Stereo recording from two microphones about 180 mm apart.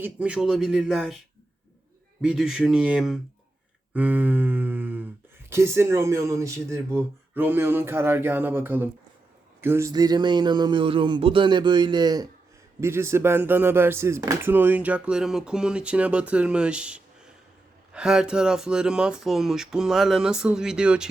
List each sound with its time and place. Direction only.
0.0 s speech: 5° right (ahead or behind)
2.2 s speech: 5° right (ahead or behind)
3.9 s a sound: 10° right (ahead or behind)
5.5 s speech: 15° right (ahead or behind)